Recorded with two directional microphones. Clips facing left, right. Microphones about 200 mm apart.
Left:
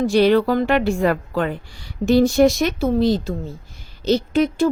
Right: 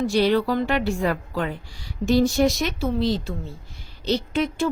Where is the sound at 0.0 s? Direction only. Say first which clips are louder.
Left 5 dB; 55° left (ahead or behind).